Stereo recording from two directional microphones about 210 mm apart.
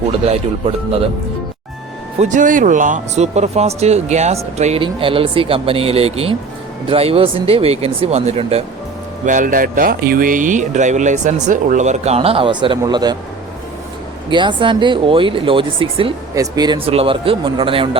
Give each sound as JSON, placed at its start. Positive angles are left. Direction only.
{"t": 0.3, "sound": "speech", "side_deg": -25}
{"t": 2.1, "sound": "speech", "side_deg": -35}
{"t": 14.3, "sound": "speech", "side_deg": -20}